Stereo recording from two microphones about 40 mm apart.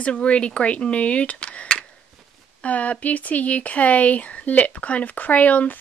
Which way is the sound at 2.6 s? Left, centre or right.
Left.